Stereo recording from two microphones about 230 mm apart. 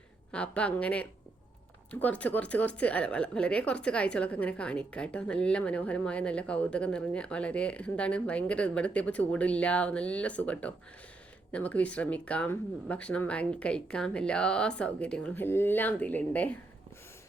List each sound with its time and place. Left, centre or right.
0.3 s a woman's voice: centre